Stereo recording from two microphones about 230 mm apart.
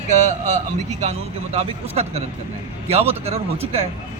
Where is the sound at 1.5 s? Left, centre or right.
Right.